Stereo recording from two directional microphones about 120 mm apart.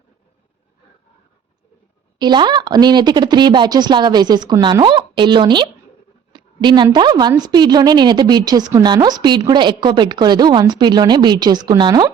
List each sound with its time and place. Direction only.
2.1 s a woman's voice: 40° right (ahead or behind)